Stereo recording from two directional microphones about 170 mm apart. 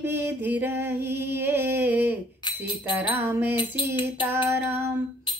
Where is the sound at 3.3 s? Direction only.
10° right (ahead or behind).